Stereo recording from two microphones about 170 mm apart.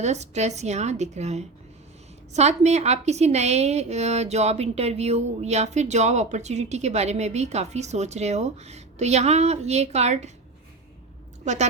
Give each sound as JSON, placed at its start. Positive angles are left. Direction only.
{"t": 0.0, "sound": "a woman's voice", "side_deg": -40}